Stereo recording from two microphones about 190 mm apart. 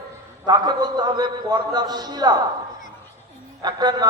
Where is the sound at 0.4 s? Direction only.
20° right (ahead or behind).